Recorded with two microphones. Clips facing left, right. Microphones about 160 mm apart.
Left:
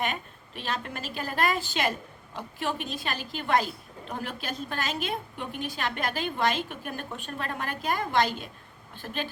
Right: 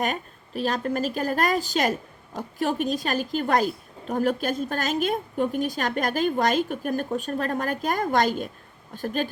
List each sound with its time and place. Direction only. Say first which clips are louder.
0.0 s a woman's voice: right 4 dB; 40° right (ahead or behind)